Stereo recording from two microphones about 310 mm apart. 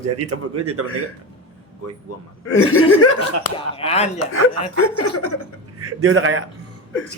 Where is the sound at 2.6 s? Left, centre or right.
Left.